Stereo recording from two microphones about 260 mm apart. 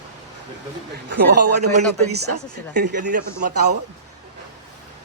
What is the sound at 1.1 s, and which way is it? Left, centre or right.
Speech, right.